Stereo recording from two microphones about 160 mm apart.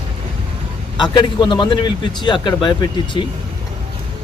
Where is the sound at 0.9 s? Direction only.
30° left (ahead or behind).